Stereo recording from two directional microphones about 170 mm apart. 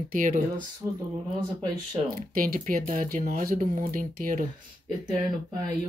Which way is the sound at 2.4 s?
50° right (ahead or behind).